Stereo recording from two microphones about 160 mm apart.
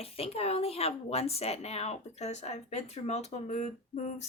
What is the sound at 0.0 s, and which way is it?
Speech, 40° left (ahead or behind).